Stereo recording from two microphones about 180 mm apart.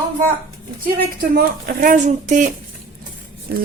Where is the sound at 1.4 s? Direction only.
55° right (ahead or behind).